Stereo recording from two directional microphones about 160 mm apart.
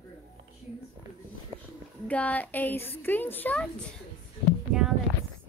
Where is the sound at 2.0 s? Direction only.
10° left (ahead or behind).